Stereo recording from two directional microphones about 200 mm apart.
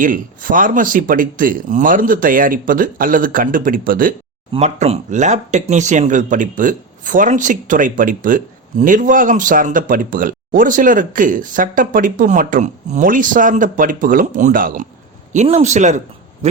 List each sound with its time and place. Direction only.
0.0 s speech: 45° right (ahead or behind)
4.5 s speech: 30° right (ahead or behind)